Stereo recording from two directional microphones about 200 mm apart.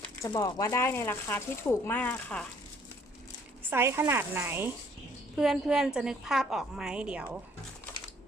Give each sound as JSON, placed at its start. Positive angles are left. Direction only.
{"t": 0.2, "sound": "speech", "side_deg": 15}
{"t": 3.7, "sound": "a woman's voice", "side_deg": -10}